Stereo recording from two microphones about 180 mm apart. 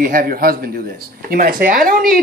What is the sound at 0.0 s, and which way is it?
A man's voice, 50° right (ahead or behind).